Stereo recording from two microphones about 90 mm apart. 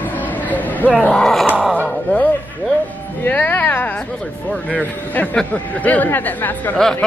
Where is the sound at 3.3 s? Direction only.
20° left (ahead or behind).